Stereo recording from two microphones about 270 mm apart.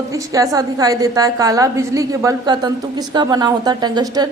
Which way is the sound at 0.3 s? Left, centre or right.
Centre.